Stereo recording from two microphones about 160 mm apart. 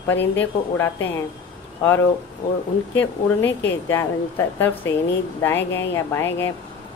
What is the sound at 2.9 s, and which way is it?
Speech, 15° left (ahead or behind).